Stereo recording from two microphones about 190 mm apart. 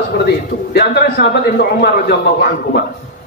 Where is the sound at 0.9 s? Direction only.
60° left (ahead or behind).